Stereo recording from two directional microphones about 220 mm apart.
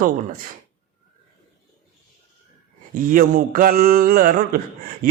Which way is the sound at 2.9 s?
40° right (ahead or behind).